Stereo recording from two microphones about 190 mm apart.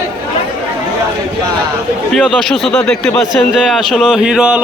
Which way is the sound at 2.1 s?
Centre (ahead or behind).